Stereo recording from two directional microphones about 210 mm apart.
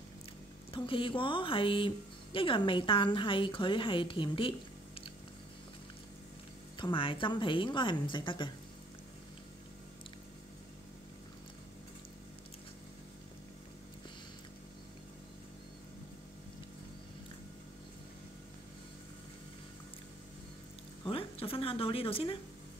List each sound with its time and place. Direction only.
0.7 s a woman's voice: 25° left (ahead or behind)
6.8 s a woman's voice: 25° left (ahead or behind)
21.0 s a sound: 25° left (ahead or behind)